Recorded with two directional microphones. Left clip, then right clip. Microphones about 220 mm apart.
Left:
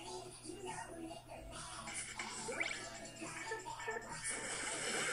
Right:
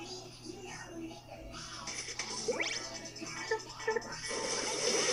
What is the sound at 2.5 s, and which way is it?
Music, 25° right (ahead or behind).